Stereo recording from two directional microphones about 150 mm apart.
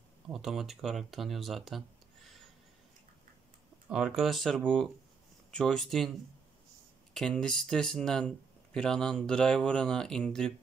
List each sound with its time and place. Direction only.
0.3 s speech: 5° right (ahead or behind)
3.9 s speech: 5° right (ahead or behind)
7.2 s speech: 5° left (ahead or behind)